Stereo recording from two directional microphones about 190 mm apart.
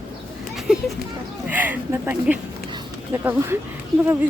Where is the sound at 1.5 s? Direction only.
10° right (ahead or behind).